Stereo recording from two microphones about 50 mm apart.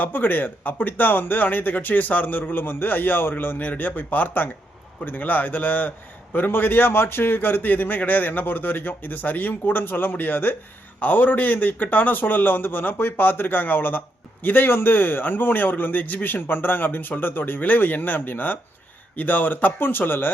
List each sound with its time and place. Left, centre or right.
0.0 s speech: left